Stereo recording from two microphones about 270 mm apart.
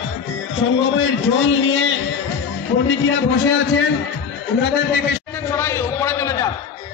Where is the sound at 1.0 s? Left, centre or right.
Left.